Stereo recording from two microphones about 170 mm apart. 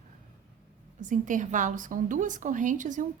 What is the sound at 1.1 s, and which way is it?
A woman's voice, 50° right (ahead or behind).